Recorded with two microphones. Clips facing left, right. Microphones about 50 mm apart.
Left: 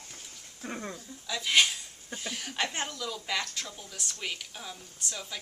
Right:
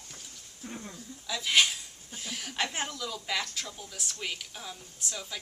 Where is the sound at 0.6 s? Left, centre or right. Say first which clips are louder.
Left 3 dB; left.